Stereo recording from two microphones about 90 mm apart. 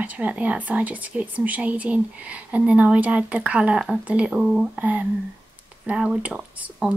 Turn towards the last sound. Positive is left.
turn(degrees=-15)  # may be behind; listen again after turning